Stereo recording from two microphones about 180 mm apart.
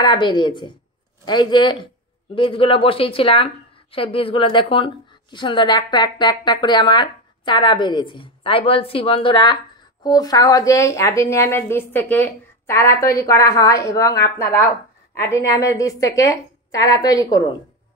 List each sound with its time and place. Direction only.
0.0 s a woman's voice: 25° left (ahead or behind)